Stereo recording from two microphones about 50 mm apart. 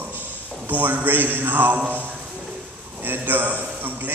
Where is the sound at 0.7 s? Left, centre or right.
Right.